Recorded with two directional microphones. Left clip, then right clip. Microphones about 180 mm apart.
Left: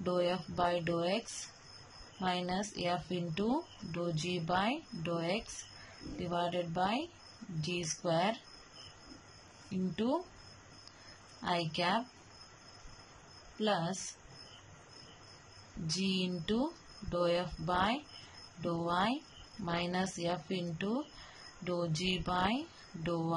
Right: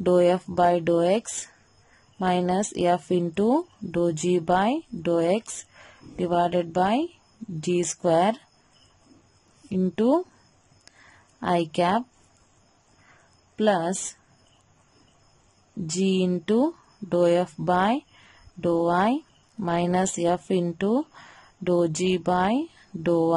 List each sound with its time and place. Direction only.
0.0 s speech: 50° right (ahead or behind)
9.7 s speech: 50° right (ahead or behind)
11.4 s speech: 50° right (ahead or behind)
13.6 s a woman's voice: 55° right (ahead or behind)
16.0 s speech: 50° right (ahead or behind)